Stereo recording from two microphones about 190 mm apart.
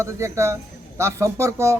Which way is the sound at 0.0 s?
15° right (ahead or behind).